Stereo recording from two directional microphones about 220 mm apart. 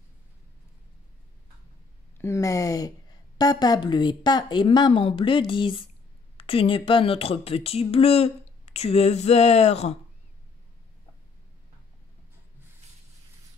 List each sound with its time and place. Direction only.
2.1 s speech: 15° left (ahead or behind); by 9.9 s 30° left (ahead or behind)